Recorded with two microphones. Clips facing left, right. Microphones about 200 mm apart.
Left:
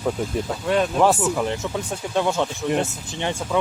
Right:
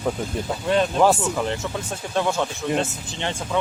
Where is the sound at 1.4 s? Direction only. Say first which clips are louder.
Left 1 dB; 15° left (ahead or behind).